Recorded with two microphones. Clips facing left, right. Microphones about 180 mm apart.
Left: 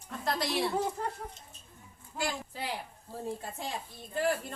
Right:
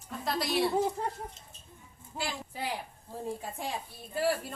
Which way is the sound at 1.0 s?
20° right (ahead or behind).